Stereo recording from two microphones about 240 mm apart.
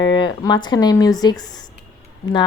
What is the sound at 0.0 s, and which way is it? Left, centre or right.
A woman's voice, centre.